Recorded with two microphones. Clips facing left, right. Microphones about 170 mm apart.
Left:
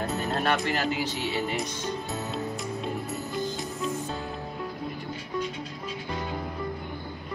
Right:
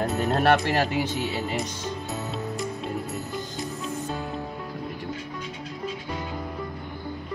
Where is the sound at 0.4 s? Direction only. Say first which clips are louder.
Right 6 dB; 60° right (ahead or behind).